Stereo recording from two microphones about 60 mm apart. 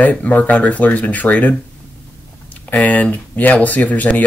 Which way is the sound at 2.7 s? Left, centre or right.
Left.